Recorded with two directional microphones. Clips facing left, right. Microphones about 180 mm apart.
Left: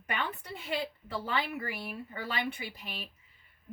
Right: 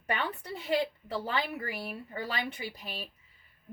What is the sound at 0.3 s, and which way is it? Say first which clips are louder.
A woman's voice: right 5 dB; 35° right (ahead or behind).